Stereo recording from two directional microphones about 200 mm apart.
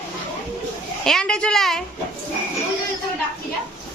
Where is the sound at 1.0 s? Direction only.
5° left (ahead or behind).